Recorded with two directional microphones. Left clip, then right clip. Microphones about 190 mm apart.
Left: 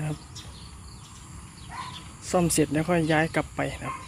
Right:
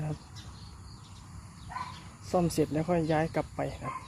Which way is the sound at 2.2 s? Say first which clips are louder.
Left 4 dB; centre (ahead or behind).